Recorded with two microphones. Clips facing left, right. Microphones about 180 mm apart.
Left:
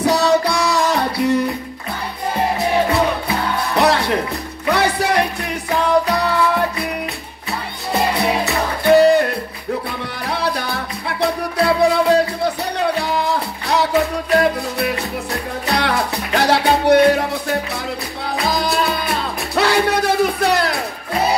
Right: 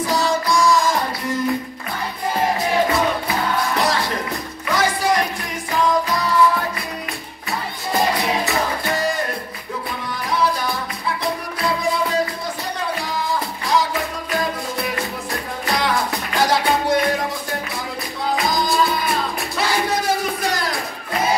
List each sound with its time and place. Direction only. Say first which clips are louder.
0.0 s music: left 5 dB; 70° left (ahead or behind)
3.7 s music: left 5 dB; 65° left (ahead or behind)
8.8 s music: left 11 dB; 65° left (ahead or behind)